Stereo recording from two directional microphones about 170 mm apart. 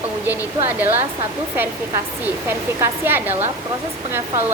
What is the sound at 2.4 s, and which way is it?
Speech, 15° right (ahead or behind).